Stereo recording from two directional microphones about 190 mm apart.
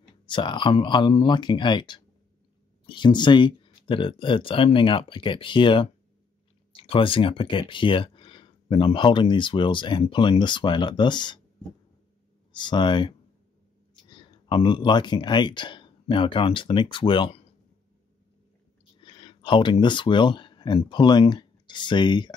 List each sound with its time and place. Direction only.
0.3 s speech: 25° left (ahead or behind)
12.5 s speech: 25° left (ahead or behind)
14.1 s speech: 25° left (ahead or behind)
18.9 s speech: 25° left (ahead or behind)